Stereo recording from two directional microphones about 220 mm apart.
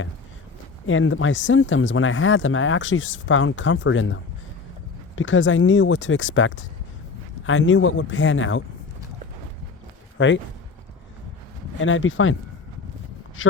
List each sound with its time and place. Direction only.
0.9 s speech: 65° left (ahead or behind)
10.2 s speech: 60° left (ahead or behind)
11.8 s speech: 60° left (ahead or behind)
13.4 s speech: 60° left (ahead or behind)